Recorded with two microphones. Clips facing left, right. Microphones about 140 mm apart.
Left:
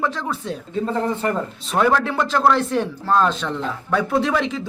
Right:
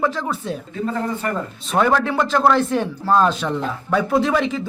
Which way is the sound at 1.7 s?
Centre (ahead or behind).